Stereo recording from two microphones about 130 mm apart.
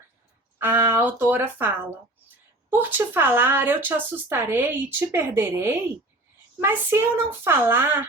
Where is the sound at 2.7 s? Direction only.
15° right (ahead or behind).